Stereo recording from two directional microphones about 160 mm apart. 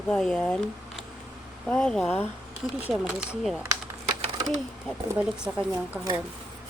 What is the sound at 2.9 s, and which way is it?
Speech, 5° right (ahead or behind).